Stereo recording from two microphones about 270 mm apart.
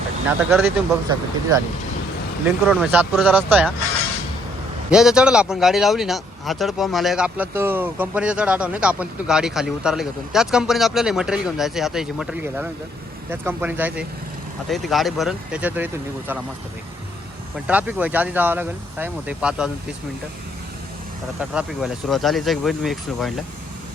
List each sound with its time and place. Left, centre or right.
0.3 s speech: centre
2.6 s speech: centre
4.9 s speech: centre
17.7 s speech: centre
21.5 s speech: centre